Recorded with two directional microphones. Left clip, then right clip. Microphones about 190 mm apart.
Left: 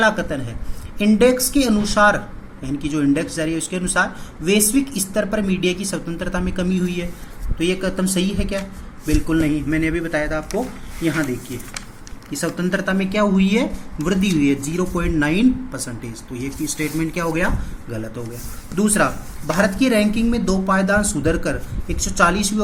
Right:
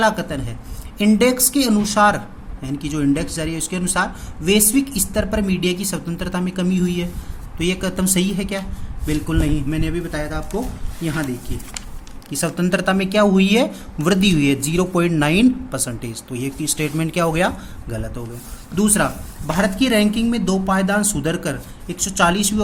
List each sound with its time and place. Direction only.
0.0 s a man's voice: 40° right (ahead or behind)
12.3 s speech: 60° right (ahead or behind)
18.7 s speech: 45° right (ahead or behind)